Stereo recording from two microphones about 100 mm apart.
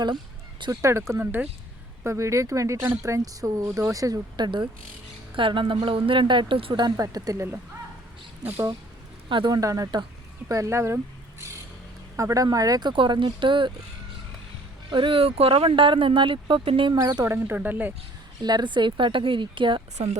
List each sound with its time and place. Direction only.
0.7 s speech: 30° right (ahead or behind)
2.0 s speech: 30° right (ahead or behind); by 6.9 s 55° right (ahead or behind)
6.9 s speech: 35° right (ahead or behind)
9.5 s speech: 35° right (ahead or behind)
12.9 s speech: 55° right (ahead or behind)
14.8 s speech: 55° right (ahead or behind)
16.9 s speech: 35° right (ahead or behind); by 17.9 s 20° right (ahead or behind)
18.4 s speech: 45° right (ahead or behind)